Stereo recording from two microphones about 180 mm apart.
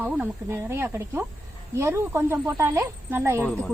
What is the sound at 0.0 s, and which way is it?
A woman's voice, 10° right (ahead or behind).